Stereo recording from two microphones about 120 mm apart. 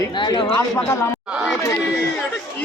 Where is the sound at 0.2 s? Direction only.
45° left (ahead or behind).